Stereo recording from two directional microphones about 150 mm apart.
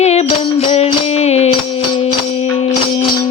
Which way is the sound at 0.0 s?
45° left (ahead or behind).